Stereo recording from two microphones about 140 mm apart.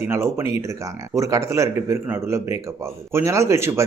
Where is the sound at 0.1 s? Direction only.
20° right (ahead or behind).